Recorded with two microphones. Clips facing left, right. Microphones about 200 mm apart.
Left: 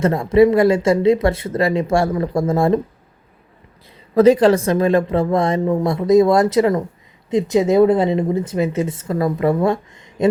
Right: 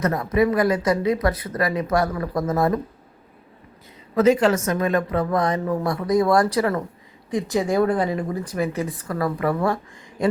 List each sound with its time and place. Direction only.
0.0 s speech: 25° left (ahead or behind)
4.1 s speech: 35° left (ahead or behind)